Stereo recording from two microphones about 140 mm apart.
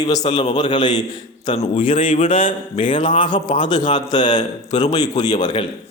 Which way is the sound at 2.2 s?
40° left (ahead or behind).